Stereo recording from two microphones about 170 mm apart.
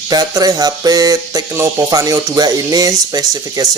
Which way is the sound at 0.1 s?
20° right (ahead or behind).